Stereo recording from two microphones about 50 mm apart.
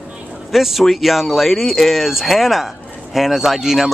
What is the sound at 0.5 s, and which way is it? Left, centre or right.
Speech, centre.